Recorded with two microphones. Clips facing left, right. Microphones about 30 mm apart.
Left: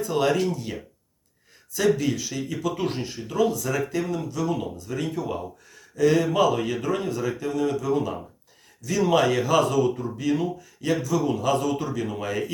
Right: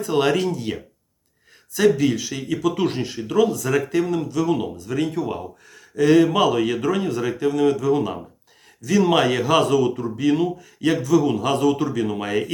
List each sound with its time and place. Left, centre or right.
0.1 s speech: right
2.0 s speech: right
3.7 s speech: right
6.0 s speech: right
6.3 s speech: right
6.8 s speech: right
7.1 s speech: right
7.4 s speech: right
7.9 s speech: right
9.6 s speech: right
11.3 s speech: right
11.8 s speech: right